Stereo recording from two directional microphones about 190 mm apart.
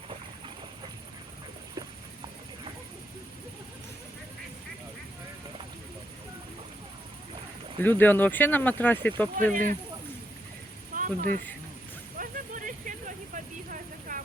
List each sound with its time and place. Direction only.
7.8 s speech: 10° left (ahead or behind)
9.5 s speech: 45° right (ahead or behind)
10.9 s a sound: 45° right (ahead or behind)
12.1 s vehicle: 45° right (ahead or behind)